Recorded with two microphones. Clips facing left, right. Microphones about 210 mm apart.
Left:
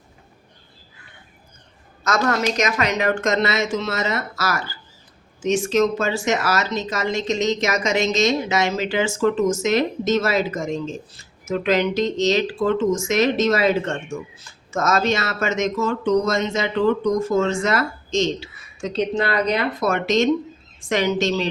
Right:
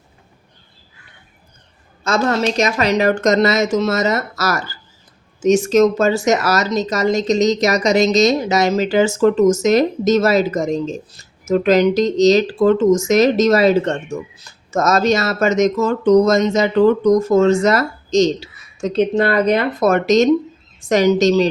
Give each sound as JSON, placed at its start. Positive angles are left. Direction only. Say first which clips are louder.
{"t": 2.0, "sound": "a woman's voice", "louder": "right 4 dB", "side_deg": -30}